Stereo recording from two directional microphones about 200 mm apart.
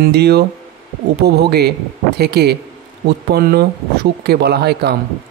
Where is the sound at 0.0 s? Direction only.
55° right (ahead or behind).